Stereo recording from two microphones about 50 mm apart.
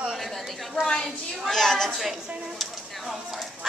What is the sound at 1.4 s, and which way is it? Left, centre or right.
Speech, centre.